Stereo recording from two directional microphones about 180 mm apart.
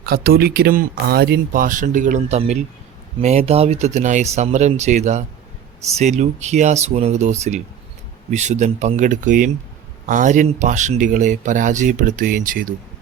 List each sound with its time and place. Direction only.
0.0 s speech: 60° right (ahead or behind)